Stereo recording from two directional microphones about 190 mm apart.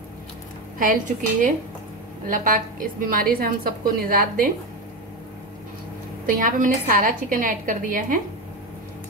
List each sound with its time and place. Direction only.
0.7 s a woman's voice: 45° right (ahead or behind)
6.2 s a woman's voice: 45° right (ahead or behind)